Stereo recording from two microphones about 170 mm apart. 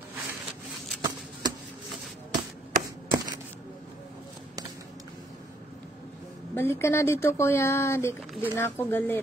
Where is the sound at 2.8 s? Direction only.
20° right (ahead or behind).